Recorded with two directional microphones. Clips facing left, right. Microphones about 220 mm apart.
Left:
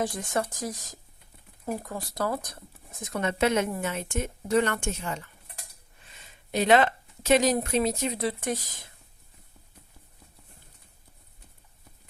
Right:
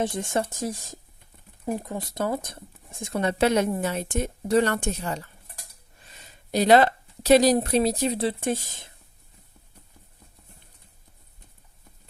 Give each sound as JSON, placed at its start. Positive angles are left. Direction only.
{"t": 0.0, "sound": "speech", "side_deg": -25}